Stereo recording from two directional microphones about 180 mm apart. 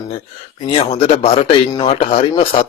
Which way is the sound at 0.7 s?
35° left (ahead or behind).